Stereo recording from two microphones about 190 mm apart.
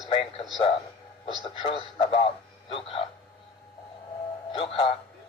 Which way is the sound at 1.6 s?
30° left (ahead or behind).